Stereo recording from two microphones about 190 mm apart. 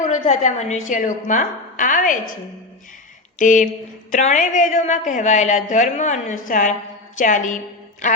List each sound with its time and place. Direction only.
0.0 s a woman's voice: 40° left (ahead or behind)
3.3 s a woman's voice: 40° left (ahead or behind)